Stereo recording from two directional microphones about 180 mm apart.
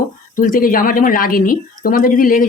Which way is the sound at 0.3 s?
50° left (ahead or behind).